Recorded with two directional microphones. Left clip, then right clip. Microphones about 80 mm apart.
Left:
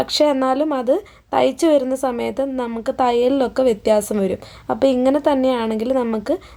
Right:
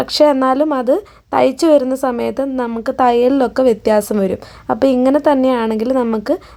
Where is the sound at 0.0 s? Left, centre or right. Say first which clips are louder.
Right 5 dB; right.